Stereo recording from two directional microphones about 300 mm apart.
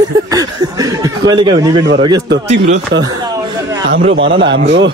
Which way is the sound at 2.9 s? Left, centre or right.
Right.